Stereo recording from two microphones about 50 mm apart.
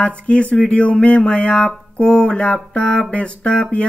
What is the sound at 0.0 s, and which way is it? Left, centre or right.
Speech, left.